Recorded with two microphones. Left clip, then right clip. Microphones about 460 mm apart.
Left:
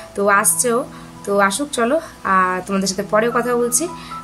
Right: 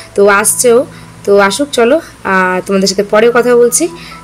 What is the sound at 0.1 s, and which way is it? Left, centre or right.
Speech, left.